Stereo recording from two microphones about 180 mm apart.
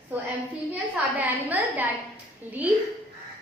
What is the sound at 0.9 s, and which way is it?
Speech, 10° right (ahead or behind).